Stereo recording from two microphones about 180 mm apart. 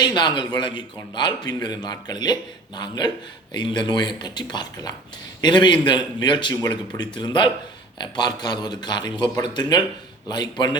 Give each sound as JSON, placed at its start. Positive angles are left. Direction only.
{"t": 0.0, "sound": "a man's voice", "side_deg": 25}